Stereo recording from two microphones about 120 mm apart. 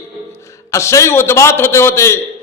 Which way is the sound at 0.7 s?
25° left (ahead or behind).